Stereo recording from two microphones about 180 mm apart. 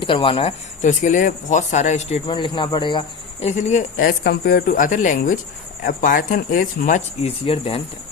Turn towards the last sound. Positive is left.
turn(degrees=30)  # may be behind; listen again after turning